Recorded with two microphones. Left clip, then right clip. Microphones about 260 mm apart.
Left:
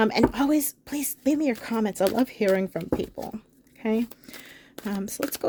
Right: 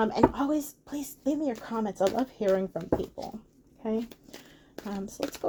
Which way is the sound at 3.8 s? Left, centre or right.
Left.